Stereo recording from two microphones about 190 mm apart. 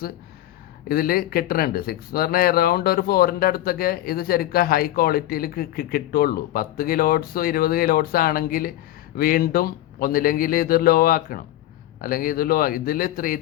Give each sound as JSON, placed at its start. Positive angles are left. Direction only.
{"t": 0.9, "sound": "speech", "side_deg": 50}